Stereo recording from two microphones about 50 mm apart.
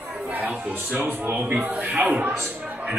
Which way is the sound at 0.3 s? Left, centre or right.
Right.